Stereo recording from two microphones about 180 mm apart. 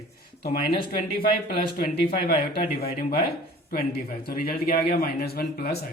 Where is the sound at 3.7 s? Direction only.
55° left (ahead or behind).